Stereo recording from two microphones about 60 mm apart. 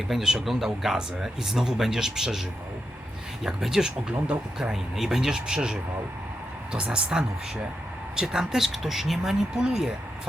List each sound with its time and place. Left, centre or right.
0.1 s speech: centre